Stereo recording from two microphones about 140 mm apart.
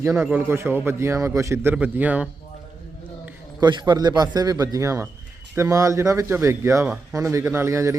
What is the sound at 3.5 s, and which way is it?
A man's voice, 30° right (ahead or behind).